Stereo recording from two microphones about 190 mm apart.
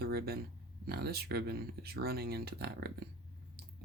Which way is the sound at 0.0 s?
55° right (ahead or behind).